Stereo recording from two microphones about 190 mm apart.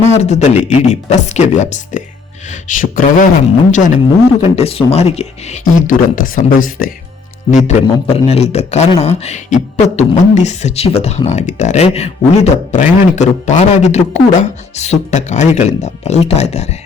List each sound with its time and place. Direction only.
0.0 s a man's voice: 35° left (ahead or behind)
7.5 s a man's voice: 35° left (ahead or behind)